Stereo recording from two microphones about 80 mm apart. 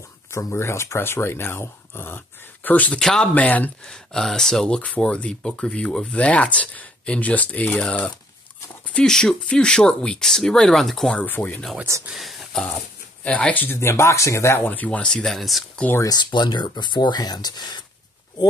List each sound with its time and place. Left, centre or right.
0.3 s speech: left; by 3.0 s centre
3.0 s speech: centre
3.3 s speech: centre
3.8 s speech: centre
11.1 s speech: left
12.1 s speech: centre
13.2 s speech: centre
13.7 s speech: left
14.7 s speech: centre
16.2 s speech: left